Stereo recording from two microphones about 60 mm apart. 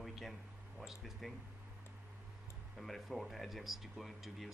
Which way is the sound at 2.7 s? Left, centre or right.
Centre.